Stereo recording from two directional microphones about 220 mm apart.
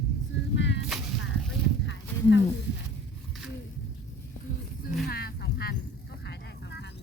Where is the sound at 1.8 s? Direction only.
55° left (ahead or behind).